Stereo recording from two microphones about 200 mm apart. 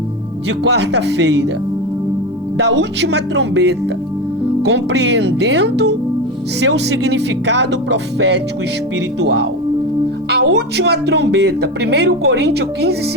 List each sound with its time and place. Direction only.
0.7 s speech: 60° right (ahead or behind)
2.6 s speech: 60° right (ahead or behind)